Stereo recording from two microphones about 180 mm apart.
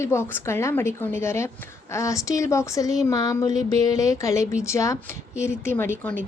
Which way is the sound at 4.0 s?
20° left (ahead or behind).